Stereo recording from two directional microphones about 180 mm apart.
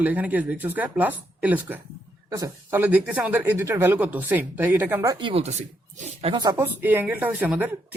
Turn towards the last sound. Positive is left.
turn(degrees=-10)  # may be behind; listen again after turning